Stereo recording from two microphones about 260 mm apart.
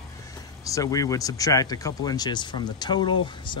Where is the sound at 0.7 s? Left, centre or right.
Centre.